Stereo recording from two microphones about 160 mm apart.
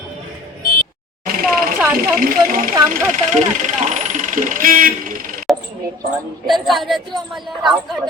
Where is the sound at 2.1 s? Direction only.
55° right (ahead or behind).